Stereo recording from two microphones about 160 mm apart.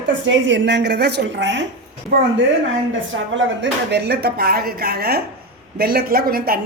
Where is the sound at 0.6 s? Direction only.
90° right.